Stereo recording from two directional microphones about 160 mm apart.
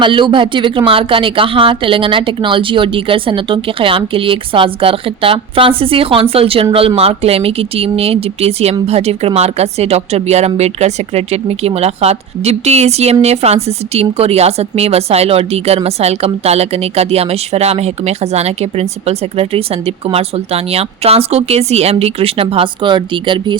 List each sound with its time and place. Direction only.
0.0 s a woman's voice: 30° right (ahead or behind)